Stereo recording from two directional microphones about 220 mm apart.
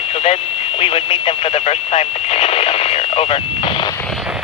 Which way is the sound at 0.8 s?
25° left (ahead or behind).